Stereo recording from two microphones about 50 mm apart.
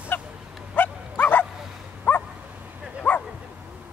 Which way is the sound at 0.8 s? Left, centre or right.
Left.